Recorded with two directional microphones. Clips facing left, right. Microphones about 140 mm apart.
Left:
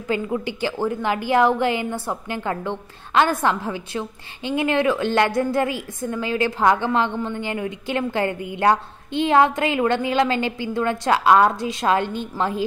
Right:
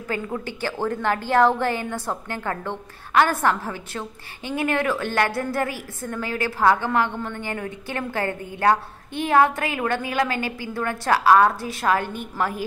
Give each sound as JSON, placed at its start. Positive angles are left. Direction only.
{"t": 0.3, "sound": "a woman's voice", "side_deg": 15}